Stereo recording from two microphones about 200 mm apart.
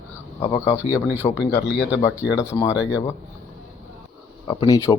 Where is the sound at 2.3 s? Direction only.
20° left (ahead or behind).